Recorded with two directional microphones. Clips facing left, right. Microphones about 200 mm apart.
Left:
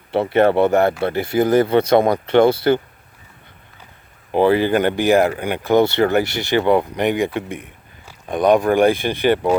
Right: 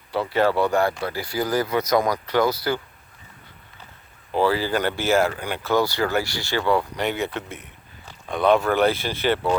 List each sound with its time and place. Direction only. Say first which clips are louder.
0.3 s speech: left 6 dB; 60° left (ahead or behind)
0.5 s speech: left 6 dB; 20° left (ahead or behind)
4.3 s speech: left 6 dB; 20° left (ahead or behind)